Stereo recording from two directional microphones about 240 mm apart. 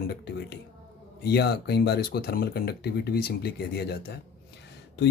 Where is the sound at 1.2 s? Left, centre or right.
Left.